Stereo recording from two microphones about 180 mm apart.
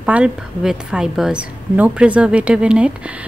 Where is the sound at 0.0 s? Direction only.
5° right (ahead or behind).